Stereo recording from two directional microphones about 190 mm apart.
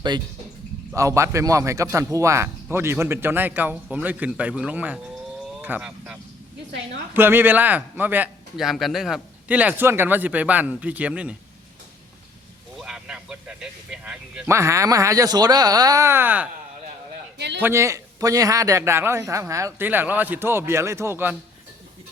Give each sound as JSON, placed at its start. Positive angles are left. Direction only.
{"t": 0.1, "sound": "speech", "side_deg": -25}
{"t": 12.7, "sound": "a sound", "side_deg": -5}
{"t": 14.5, "sound": "speech", "side_deg": -15}
{"t": 17.3, "sound": "a man's voice", "side_deg": -65}
{"t": 17.6, "sound": "speech", "side_deg": -15}